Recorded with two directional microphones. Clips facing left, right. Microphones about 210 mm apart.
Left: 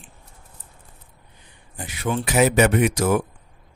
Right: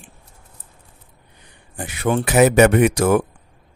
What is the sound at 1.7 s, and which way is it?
Speech, 60° right (ahead or behind).